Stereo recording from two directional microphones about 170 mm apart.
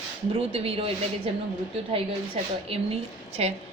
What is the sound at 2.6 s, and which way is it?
Speech, 35° right (ahead or behind).